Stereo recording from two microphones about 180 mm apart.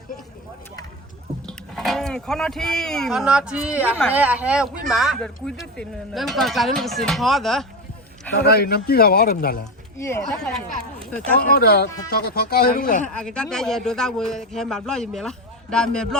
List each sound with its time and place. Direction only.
1.5 s a man's voice: centre (ahead or behind)
8.4 s speech: 60° left (ahead or behind)
10.0 s speech: 15° left (ahead or behind)
11.3 s speech: 60° left (ahead or behind)
13.1 s a man's voice: 5° left (ahead or behind)